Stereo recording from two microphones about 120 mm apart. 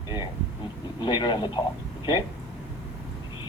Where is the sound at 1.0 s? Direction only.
40° left (ahead or behind).